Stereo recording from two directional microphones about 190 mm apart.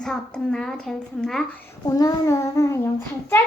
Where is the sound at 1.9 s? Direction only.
20° left (ahead or behind).